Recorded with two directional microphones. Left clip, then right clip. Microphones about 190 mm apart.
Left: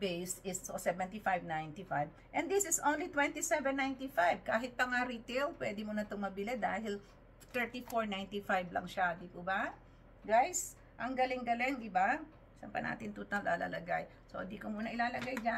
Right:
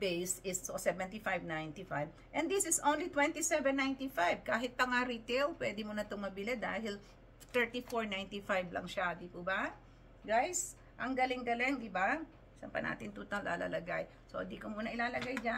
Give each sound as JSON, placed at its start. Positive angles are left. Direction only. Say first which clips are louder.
{"t": 0.0, "sound": "a woman's voice", "louder": "right 2 dB", "side_deg": -20}